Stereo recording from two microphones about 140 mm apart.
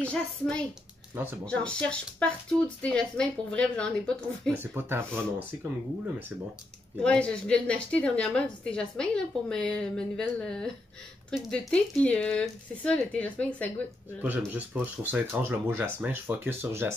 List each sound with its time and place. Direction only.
0.0 s a woman's voice: 10° left (ahead or behind)
4.6 s speech: 15° right (ahead or behind)
7.0 s a woman's voice: 5° left (ahead or behind)
14.2 s speech: 10° right (ahead or behind)